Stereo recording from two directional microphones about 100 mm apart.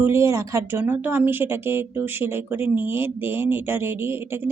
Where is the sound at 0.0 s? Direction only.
25° right (ahead or behind).